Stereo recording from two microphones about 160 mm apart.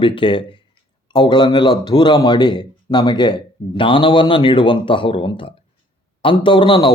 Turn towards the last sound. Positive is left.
turn(degrees=30)  # may be behind; listen again after turning